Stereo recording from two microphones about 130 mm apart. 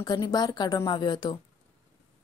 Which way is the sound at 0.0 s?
30° left (ahead or behind).